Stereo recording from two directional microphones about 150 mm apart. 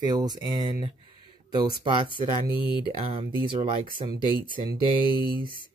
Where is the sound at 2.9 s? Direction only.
40° right (ahead or behind).